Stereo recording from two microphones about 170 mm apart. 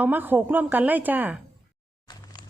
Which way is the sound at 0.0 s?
10° right (ahead or behind).